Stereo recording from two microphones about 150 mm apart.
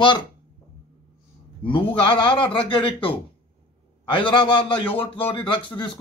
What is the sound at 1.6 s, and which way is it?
A man's voice, 35° left (ahead or behind).